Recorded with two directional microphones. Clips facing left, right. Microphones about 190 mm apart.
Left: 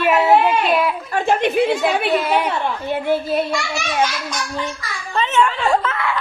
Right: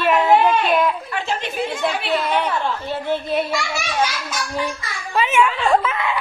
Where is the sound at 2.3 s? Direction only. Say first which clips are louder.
Left 2 dB; 10° left (ahead or behind).